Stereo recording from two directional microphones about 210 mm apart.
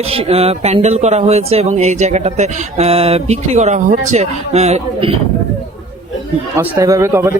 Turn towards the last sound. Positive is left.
turn(degrees=-10)  # may be behind; listen again after turning